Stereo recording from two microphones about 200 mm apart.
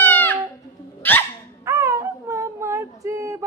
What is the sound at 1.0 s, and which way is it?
Dog, 10° left (ahead or behind).